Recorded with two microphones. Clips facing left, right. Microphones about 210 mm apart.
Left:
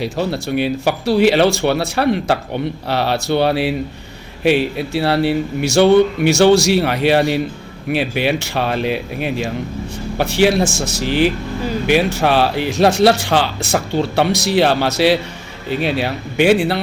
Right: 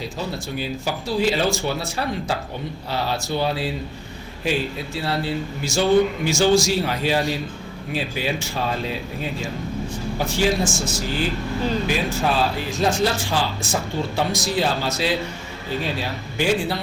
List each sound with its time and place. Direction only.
0.0 s speech: 70° left (ahead or behind)